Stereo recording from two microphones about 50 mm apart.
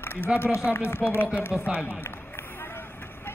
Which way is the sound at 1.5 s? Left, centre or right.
Right.